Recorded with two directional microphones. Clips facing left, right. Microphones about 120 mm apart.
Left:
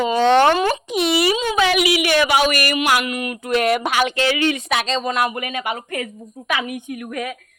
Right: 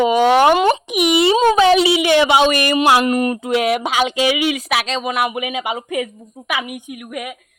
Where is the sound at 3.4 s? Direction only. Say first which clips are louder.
Right 1 dB; 15° right (ahead or behind).